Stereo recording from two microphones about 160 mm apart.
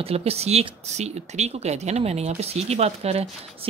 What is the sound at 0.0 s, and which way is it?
Speech, 40° right (ahead or behind).